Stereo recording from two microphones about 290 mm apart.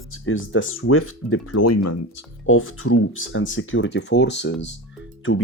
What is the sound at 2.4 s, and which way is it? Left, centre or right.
Speech, left.